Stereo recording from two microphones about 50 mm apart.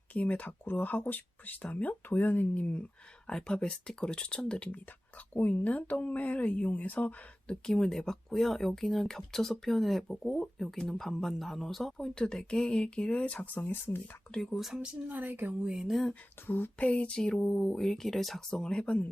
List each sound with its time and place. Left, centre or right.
0.1 s speech: left
3.2 s speech: centre
5.3 s speech: left
7.4 s speech: centre; by 14.0 s left
14.5 s speech: centre
15.1 s speech: right
15.6 s speech: centre
16.5 s speech: left
16.7 s speech: left